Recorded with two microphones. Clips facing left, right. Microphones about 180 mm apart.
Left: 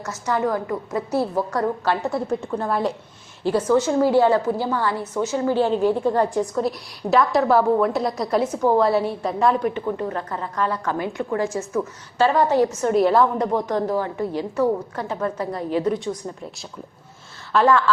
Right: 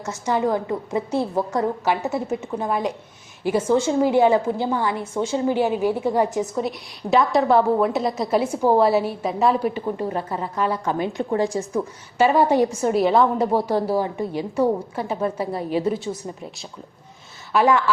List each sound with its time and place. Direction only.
0.0 s a woman's voice: 30° right (ahead or behind)
3.7 s a woman's voice: 25° right (ahead or behind)
5.5 s a woman's voice: 10° right (ahead or behind)
10.8 s a woman's voice: 20° right (ahead or behind)
11.7 s a woman's voice: 15° right (ahead or behind)
15.5 s a woman's voice: 25° right (ahead or behind)
17.5 s a woman's voice: 15° right (ahead or behind)